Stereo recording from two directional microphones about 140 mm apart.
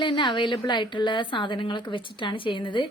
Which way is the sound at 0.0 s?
35° left (ahead or behind).